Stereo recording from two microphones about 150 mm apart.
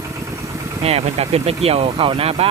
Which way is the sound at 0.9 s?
40° right (ahead or behind).